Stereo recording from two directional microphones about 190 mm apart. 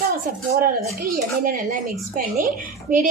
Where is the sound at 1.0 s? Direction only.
45° right (ahead or behind).